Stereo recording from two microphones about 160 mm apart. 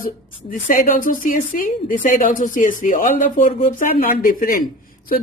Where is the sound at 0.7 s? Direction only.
60° left (ahead or behind).